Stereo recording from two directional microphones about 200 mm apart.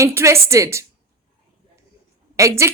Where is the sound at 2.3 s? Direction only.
15° right (ahead or behind).